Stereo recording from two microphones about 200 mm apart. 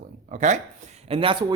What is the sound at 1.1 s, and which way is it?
Speech, 25° right (ahead or behind).